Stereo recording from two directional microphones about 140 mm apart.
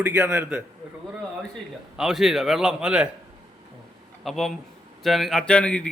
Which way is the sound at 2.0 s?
5° right (ahead or behind).